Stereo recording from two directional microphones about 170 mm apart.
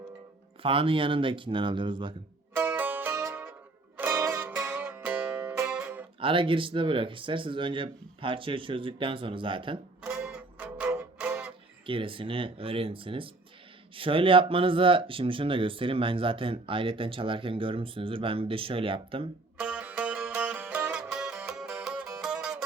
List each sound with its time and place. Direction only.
0.6 s speech: 30° right (ahead or behind)
2.6 s music: 10° right (ahead or behind)
6.1 s speech: 30° right (ahead or behind)
10.0 s music: 5° right (ahead or behind)
11.9 s speech: 30° right (ahead or behind)
19.5 s music: 5° right (ahead or behind)